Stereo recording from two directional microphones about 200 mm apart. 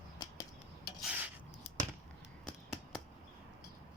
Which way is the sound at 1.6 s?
5° right (ahead or behind).